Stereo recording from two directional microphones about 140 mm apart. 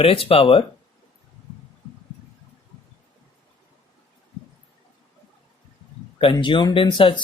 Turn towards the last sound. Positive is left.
turn(degrees=40)  # may be behind; listen again after turning